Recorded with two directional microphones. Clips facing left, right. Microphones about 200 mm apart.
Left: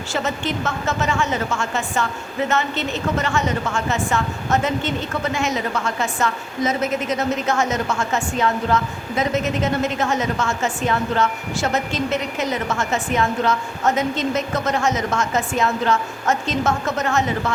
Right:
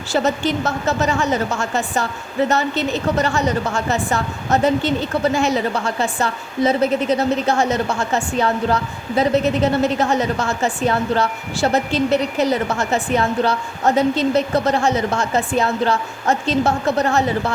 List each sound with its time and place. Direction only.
0.1 s a woman's voice: 35° right (ahead or behind)